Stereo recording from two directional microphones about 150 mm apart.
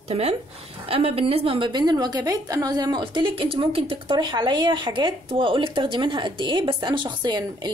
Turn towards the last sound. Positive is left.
turn(degrees=-30)  # may be behind; listen again after turning